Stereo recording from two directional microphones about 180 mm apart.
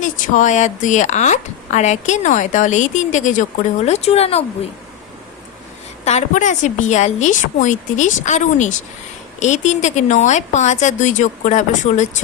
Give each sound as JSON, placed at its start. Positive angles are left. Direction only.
{"t": 0.0, "sound": "speech", "side_deg": 45}
{"t": 6.1, "sound": "speech", "side_deg": 40}